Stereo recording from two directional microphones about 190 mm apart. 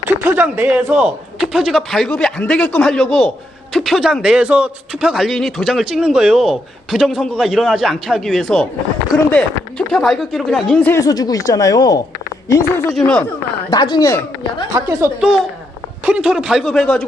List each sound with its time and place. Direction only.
0.3 s speech: 10° right (ahead or behind); by 12.8 s 15° left (ahead or behind)
12.9 s speech: 5° left (ahead or behind)
13.7 s speech: 20° left (ahead or behind)
14.8 s speech: 15° right (ahead or behind)
16.0 s speech: 5° right (ahead or behind)